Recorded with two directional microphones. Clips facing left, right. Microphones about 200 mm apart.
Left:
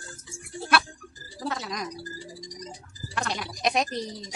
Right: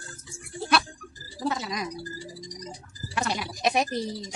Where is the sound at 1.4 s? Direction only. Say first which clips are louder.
Right 3 dB; centre (ahead or behind).